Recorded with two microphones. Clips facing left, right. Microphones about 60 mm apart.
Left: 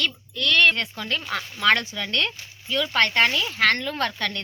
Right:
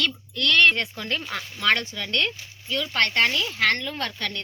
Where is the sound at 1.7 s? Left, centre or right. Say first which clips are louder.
Left 1 dB; centre.